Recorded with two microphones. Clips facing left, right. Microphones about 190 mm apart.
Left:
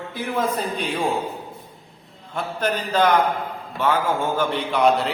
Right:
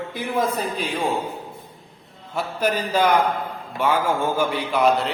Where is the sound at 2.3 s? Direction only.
10° right (ahead or behind).